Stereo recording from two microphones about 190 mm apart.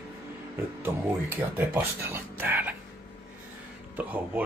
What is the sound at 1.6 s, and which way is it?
Speech, 10° right (ahead or behind).